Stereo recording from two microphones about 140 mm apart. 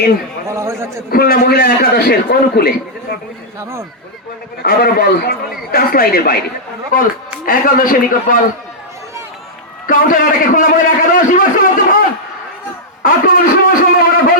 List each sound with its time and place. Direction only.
0.4 s a man's voice: 20° right (ahead or behind)
1.1 s a man's voice: 90° left
4.6 s a man's voice: 90° left
6.9 s a man's voice: 80° left
9.8 s a man's voice: 80° left
13.0 s speech: 80° left